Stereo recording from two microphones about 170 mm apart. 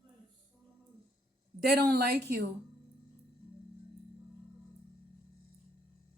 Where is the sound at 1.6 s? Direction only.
70° right (ahead or behind).